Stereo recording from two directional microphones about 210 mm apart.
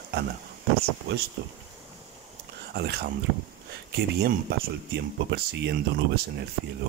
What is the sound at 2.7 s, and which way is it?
Speech, 50° right (ahead or behind).